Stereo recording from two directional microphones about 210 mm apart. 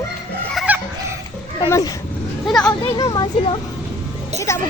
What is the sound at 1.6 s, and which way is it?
Speech, 15° left (ahead or behind).